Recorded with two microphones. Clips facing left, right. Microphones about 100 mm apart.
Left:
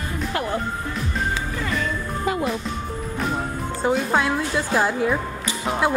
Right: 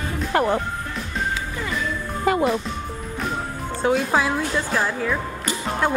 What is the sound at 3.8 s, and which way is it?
Music, centre (ahead or behind).